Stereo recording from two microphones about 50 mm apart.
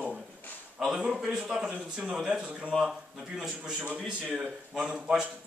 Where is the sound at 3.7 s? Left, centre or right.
Right.